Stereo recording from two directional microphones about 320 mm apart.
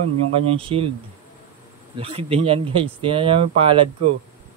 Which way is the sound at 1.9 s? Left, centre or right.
Centre.